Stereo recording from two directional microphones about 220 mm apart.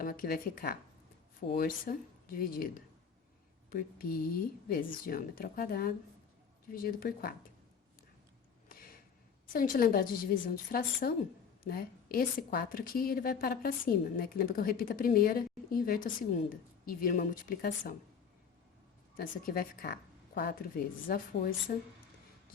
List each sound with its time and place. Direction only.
0.0 s a woman's voice: 40° left (ahead or behind)
8.7 s a sound: 40° left (ahead or behind)
9.5 s a woman's voice: 40° left (ahead or behind)
19.1 s speech: 40° left (ahead or behind)